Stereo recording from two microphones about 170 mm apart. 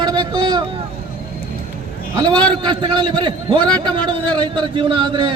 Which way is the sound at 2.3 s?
10° left (ahead or behind).